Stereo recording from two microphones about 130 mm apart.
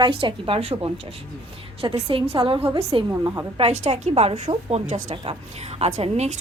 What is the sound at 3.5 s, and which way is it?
A woman's voice, 55° right (ahead or behind).